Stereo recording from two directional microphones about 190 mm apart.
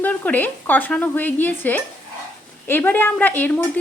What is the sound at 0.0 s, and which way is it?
Speech, 10° left (ahead or behind).